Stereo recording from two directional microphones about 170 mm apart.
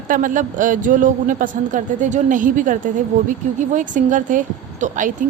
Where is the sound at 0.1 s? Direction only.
50° right (ahead or behind).